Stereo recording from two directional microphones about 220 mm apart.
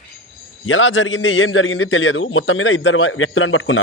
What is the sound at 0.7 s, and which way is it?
A man's voice, 60° left (ahead or behind).